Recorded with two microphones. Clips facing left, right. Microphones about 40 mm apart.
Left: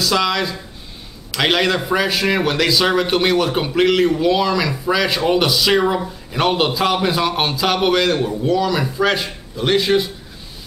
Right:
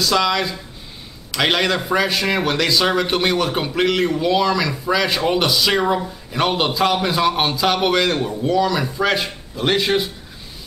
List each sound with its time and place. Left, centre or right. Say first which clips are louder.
0.0 s a man's voice: even; centre
9.2 s a man's voice: even; centre